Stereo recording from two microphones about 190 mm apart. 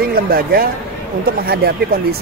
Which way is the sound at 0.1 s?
50° right (ahead or behind).